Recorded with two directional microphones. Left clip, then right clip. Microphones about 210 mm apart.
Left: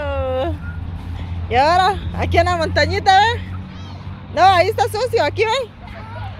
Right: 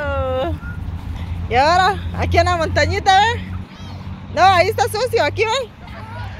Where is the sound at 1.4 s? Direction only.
10° left (ahead or behind).